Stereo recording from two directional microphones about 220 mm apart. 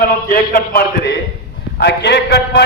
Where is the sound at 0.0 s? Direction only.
40° left (ahead or behind).